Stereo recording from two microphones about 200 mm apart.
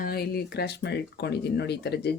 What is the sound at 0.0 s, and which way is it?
Speech, 50° left (ahead or behind).